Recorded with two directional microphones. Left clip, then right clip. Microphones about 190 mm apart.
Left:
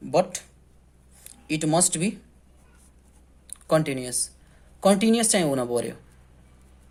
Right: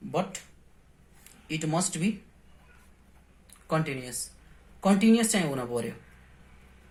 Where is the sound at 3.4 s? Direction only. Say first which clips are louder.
Left 7 dB; 35° left (ahead or behind).